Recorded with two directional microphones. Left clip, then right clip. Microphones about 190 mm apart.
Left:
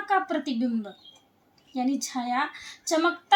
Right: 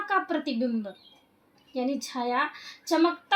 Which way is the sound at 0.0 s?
50° right (ahead or behind).